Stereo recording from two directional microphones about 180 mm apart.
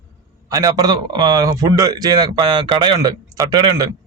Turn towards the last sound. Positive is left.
turn(degrees=-20)  # may be behind; listen again after turning